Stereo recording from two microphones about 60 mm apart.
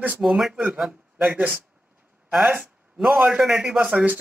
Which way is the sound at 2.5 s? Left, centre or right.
Centre.